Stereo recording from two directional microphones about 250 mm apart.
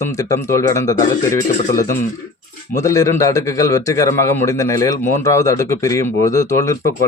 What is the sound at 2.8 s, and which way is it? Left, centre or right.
A man's voice, centre.